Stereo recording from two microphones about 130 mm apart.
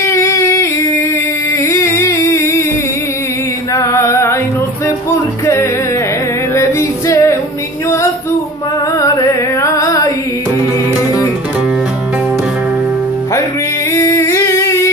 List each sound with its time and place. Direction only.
0.0 s a sound: 20° left (ahead or behind)
1.7 s music: 20° left (ahead or behind)
3.7 s chant: 20° left (ahead or behind)
4.8 s music: 20° left (ahead or behind)
9.0 s music: 25° left (ahead or behind)
13.9 s humming: 20° left (ahead or behind)